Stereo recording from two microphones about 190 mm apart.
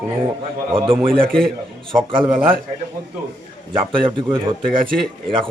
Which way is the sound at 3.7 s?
25° right (ahead or behind).